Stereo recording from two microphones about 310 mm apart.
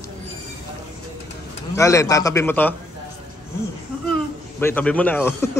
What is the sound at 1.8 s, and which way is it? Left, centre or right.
Speech, centre.